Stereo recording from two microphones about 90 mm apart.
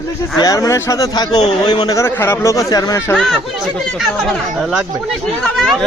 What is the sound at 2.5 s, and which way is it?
Speech, 40° left (ahead or behind).